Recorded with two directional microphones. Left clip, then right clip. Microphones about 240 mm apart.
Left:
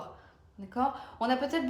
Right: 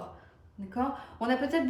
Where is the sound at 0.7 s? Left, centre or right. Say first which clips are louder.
Left 2 dB; centre.